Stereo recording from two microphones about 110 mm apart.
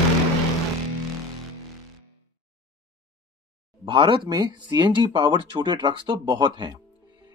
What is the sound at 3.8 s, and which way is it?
Speech, 45° right (ahead or behind).